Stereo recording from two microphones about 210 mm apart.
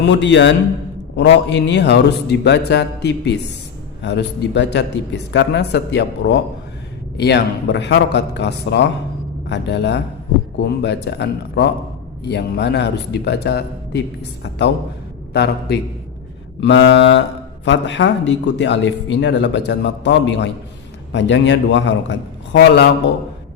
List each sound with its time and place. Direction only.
0.0 s a man's voice: 55° left (ahead or behind)